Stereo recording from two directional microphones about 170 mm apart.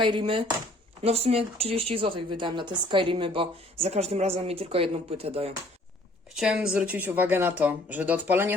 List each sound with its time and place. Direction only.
0.0 s speech: 30° right (ahead or behind)
6.3 s speech: 5° right (ahead or behind)